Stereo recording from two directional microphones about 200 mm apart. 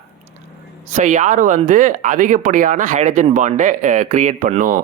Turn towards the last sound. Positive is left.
turn(degrees=-40)  # may be behind; listen again after turning